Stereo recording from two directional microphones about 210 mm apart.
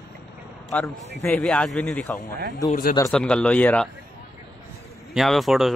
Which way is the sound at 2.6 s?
40° left (ahead or behind).